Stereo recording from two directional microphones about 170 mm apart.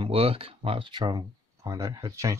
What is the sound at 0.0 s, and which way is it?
Speech, 35° right (ahead or behind).